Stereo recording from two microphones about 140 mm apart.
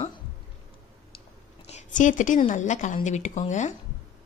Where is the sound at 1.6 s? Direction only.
55° left (ahead or behind).